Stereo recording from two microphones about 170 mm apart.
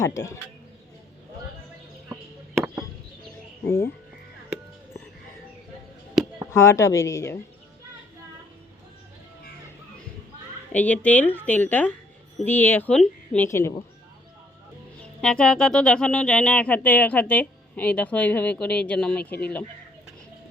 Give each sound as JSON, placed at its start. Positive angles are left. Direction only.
{"t": 0.0, "sound": "speech", "side_deg": 15}
{"t": 3.6, "sound": "speech", "side_deg": 15}
{"t": 6.5, "sound": "speech", "side_deg": 15}
{"t": 10.7, "sound": "speech", "side_deg": 10}
{"t": 15.2, "sound": "speech", "side_deg": 5}